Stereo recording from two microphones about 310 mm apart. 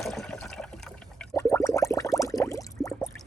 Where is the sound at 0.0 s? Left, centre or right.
Centre.